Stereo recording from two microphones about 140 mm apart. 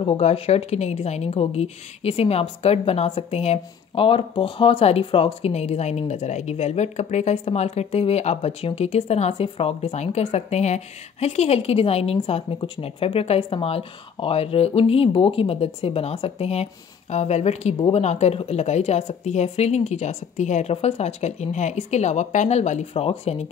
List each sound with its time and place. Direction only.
0.0 s a woman's voice: 50° left (ahead or behind)